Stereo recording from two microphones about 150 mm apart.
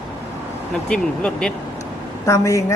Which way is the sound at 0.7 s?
5° left (ahead or behind).